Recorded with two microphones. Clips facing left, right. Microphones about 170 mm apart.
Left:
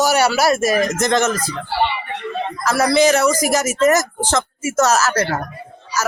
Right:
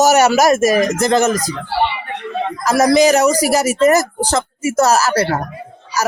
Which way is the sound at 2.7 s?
40° right (ahead or behind).